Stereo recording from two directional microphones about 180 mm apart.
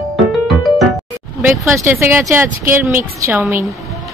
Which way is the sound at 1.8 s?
15° right (ahead or behind).